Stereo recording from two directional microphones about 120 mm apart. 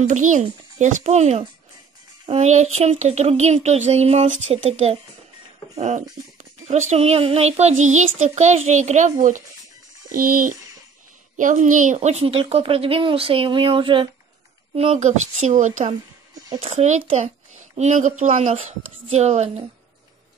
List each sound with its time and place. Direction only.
0.0 s a child's voice: 90° right; by 4.9 s 60° right (ahead or behind)
5.8 s child singing: 80° right
11.3 s speech: 90° right; by 14.0 s 45° right (ahead or behind)
15.0 s a child's voice: 80° right
18.5 s speech: 70° right (ahead or behind)